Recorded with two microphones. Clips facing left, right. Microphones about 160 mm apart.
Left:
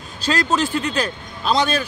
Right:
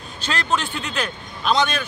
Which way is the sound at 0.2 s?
35° left (ahead or behind).